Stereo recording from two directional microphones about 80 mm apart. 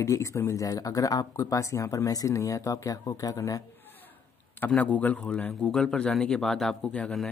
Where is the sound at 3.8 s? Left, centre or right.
Left.